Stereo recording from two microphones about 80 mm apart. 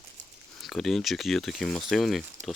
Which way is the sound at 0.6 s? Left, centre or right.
Centre.